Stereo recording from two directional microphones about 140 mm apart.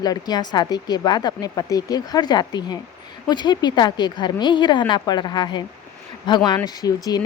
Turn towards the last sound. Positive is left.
turn(degrees=30)  # may be behind; listen again after turning